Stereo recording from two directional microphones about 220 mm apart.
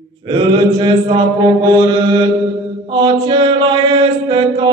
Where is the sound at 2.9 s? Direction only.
20° right (ahead or behind).